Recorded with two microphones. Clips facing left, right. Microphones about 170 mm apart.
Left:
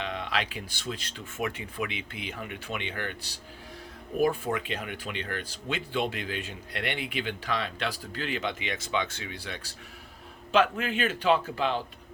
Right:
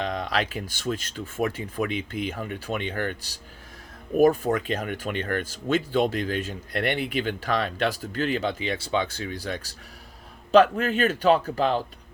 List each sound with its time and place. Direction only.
0.0 s speech: 40° right (ahead or behind)